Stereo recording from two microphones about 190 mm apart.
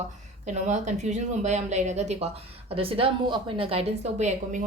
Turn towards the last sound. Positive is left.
turn(degrees=-40)  # may be behind; listen again after turning